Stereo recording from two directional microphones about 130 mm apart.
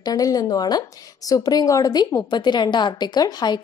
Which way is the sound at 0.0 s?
30° left (ahead or behind).